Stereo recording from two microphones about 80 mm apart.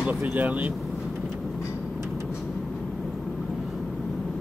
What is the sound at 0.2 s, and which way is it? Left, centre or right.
Speech, centre.